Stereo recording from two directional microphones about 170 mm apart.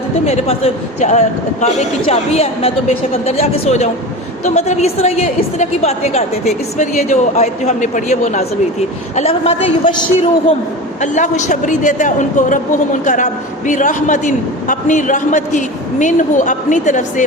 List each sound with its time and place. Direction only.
0.3 s a woman's voice: 35° left (ahead or behind)
11.0 s a woman's voice: 45° left (ahead or behind)